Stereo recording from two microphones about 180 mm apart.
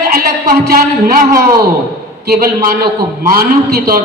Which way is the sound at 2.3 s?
55° right (ahead or behind).